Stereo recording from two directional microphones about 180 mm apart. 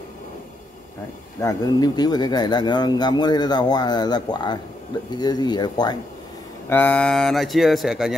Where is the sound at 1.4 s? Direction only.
20° left (ahead or behind).